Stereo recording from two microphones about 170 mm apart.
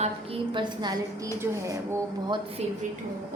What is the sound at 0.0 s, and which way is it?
A woman's voice, 30° right (ahead or behind).